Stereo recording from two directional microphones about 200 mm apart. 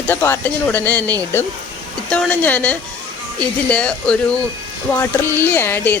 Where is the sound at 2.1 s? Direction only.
5° left (ahead or behind).